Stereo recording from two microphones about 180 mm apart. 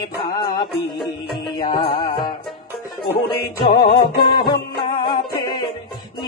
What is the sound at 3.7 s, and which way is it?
Music, 25° left (ahead or behind).